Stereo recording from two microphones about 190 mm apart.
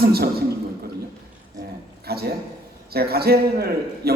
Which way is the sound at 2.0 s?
55° right (ahead or behind).